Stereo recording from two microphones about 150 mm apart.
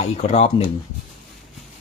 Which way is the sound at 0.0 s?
45° left (ahead or behind).